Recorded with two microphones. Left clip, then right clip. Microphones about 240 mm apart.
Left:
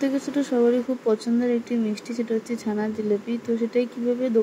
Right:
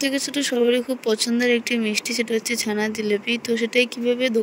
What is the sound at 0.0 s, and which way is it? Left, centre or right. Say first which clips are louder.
Speech: right 2 dB; right.